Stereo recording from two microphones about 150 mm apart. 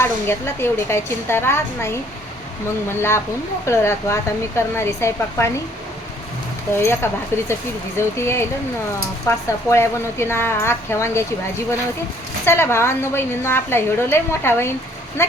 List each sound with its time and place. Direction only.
0.0 s a woman's voice: 15° left (ahead or behind)
2.9 s a woman's voice: 15° left (ahead or behind)
6.7 s a woman's voice: 15° left (ahead or behind)